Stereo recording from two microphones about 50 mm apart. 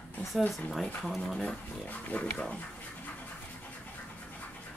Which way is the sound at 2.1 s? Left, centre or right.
Left.